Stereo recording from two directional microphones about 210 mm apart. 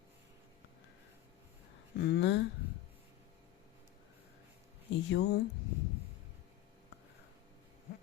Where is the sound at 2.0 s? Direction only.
55° left (ahead or behind).